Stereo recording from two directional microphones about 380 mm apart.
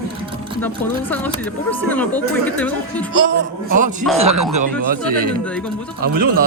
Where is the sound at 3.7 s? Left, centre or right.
Centre.